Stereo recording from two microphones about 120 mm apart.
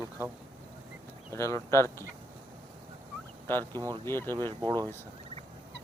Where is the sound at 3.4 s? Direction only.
20° left (ahead or behind).